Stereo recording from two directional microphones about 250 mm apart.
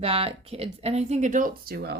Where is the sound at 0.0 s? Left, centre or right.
Right.